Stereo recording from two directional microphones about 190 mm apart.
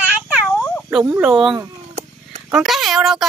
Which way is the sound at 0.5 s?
5° left (ahead or behind).